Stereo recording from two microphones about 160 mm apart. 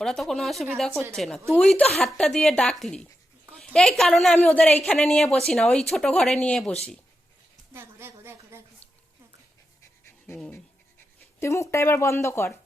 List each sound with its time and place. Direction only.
0.0 s a woman's voice: centre (ahead or behind)
7.7 s a sound: 15° right (ahead or behind)
10.3 s a woman's voice: 5° left (ahead or behind)
11.3 s speech: 15° left (ahead or behind)